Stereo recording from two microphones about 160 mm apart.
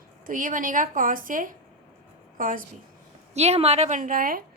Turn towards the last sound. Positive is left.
turn(degrees=-65)  # may be behind; listen again after turning